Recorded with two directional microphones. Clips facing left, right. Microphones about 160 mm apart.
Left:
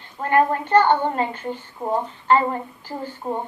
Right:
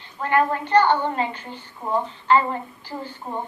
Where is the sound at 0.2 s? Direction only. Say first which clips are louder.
Left 2 dB; 40° left (ahead or behind).